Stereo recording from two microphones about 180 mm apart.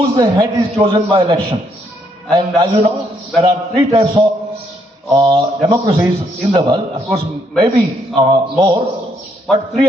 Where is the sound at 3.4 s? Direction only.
30° right (ahead or behind).